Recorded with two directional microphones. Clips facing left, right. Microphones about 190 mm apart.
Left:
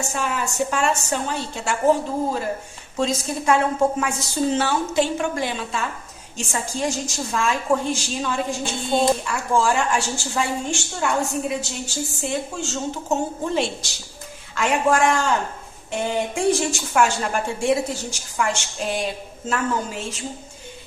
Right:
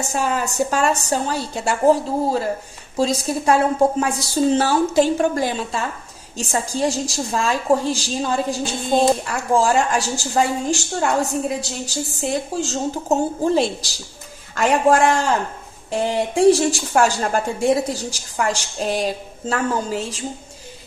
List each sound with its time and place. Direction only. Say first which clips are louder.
0.1 s a woman's voice: right 4 dB; 40° right (ahead or behind)